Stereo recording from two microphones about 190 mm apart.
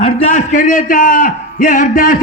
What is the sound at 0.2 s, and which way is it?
A man's voice, 40° left (ahead or behind).